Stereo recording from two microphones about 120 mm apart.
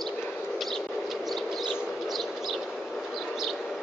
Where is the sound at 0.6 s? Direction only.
Centre (ahead or behind).